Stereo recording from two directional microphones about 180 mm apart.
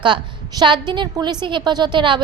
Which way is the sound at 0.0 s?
25° right (ahead or behind).